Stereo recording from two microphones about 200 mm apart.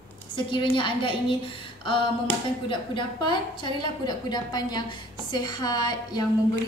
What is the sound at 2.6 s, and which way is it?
A woman's voice, 25° left (ahead or behind).